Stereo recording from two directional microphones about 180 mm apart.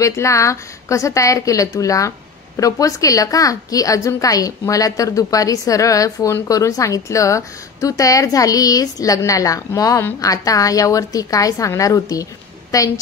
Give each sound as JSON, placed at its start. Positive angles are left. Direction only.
{"t": 0.0, "sound": "a woman's voice", "side_deg": 15}